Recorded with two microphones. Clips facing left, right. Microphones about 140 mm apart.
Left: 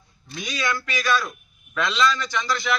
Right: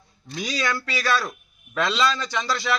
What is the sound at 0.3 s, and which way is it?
A man's voice, 35° right (ahead or behind).